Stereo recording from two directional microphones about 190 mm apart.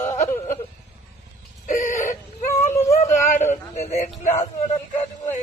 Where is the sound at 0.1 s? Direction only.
40° left (ahead or behind).